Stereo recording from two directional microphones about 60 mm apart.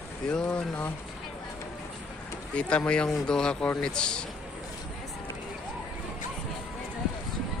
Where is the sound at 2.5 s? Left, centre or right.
Centre.